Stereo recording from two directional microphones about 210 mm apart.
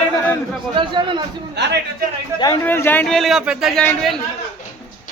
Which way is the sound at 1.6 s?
55° right (ahead or behind).